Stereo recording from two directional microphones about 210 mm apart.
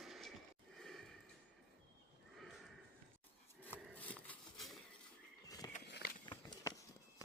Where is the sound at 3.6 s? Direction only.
10° left (ahead or behind).